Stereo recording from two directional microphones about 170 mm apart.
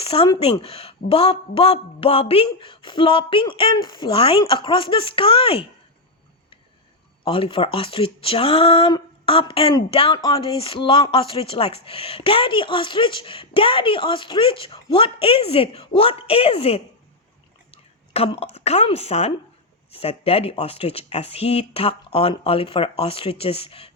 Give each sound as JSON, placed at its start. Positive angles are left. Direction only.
{"t": 0.0, "sound": "a woman's voice", "side_deg": 35}
{"t": 7.3, "sound": "a woman's voice", "side_deg": 30}